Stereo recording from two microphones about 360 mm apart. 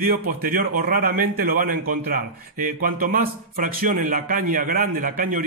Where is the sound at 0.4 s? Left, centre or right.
Right.